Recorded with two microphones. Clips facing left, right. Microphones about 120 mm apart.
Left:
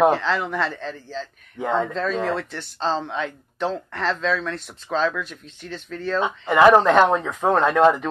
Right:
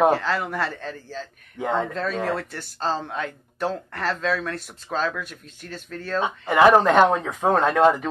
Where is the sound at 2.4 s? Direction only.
45° right (ahead or behind).